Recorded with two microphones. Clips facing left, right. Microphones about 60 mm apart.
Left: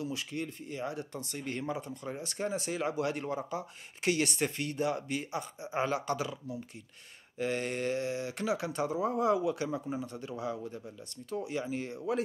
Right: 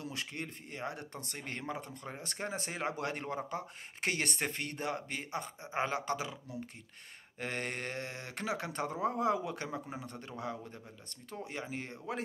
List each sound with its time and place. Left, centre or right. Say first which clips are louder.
0.0 s speech: left 5 dB; right
7.3 s speech: left 6 dB; right